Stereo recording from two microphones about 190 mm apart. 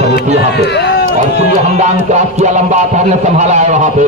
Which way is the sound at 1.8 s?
35° right (ahead or behind).